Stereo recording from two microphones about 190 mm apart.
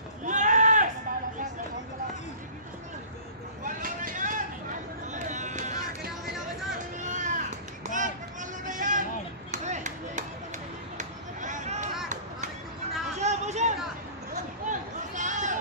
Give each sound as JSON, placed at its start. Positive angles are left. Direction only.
{"t": 0.2, "sound": "sheep", "side_deg": -40}
{"t": 3.6, "sound": "vehicle", "side_deg": -45}
{"t": 5.1, "sound": "music", "side_deg": -40}
{"t": 7.0, "sound": "a sound", "side_deg": -40}
{"t": 9.5, "sound": "chop", "side_deg": -40}
{"t": 13.2, "sound": "a sound", "side_deg": -35}